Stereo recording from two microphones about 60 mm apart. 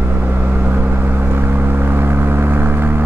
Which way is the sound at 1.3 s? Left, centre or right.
Right.